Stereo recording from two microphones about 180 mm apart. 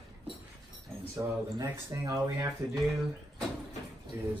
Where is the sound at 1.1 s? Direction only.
15° right (ahead or behind).